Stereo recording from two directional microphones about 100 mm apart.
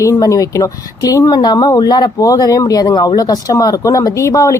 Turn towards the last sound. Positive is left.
turn(degrees=35)  # may be behind; listen again after turning